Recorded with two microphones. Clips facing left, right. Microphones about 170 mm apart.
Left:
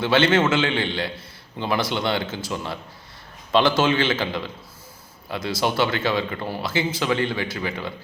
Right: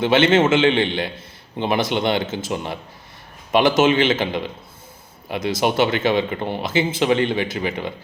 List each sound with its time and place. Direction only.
0.0 s speech: 20° right (ahead or behind)